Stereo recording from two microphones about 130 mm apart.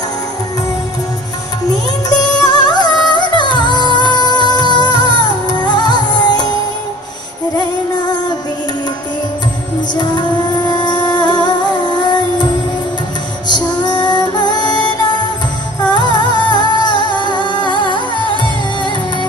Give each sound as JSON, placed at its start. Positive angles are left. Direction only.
{"t": 2.0, "sound": "music", "side_deg": 30}
{"t": 10.7, "sound": "music", "side_deg": 35}
{"t": 13.8, "sound": "music", "side_deg": 35}
{"t": 15.9, "sound": "music", "side_deg": 35}